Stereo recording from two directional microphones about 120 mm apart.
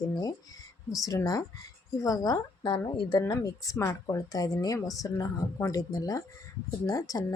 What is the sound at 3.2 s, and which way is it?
Speech, 25° left (ahead or behind).